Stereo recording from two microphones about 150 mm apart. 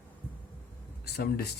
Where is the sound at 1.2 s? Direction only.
90° left.